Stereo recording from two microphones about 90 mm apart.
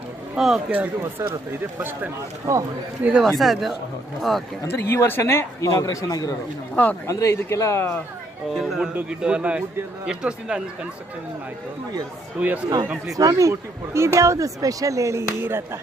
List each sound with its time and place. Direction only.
0.3 s speech: 5° right (ahead or behind)
1.2 s speech: 30° right (ahead or behind)
2.5 s speech: 35° right (ahead or behind)
3.0 s a man's voice: 15° right (ahead or behind)
3.2 s speech: centre (ahead or behind)
4.7 s a man's voice: 25° left (ahead or behind)
8.5 s a man's voice: centre (ahead or behind)
12.4 s a man's voice: 15° right (ahead or behind)
13.1 s speech: 40° right (ahead or behind)
15.3 s speech: 25° right (ahead or behind)